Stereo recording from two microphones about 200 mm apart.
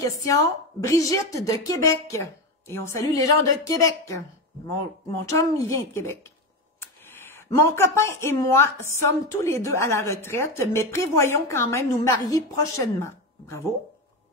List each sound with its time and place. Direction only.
0.0 s speech: 15° left (ahead or behind)
5.4 s speech: 15° left (ahead or behind)